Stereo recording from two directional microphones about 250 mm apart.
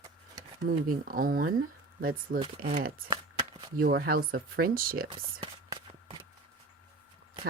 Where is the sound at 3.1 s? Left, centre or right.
Centre.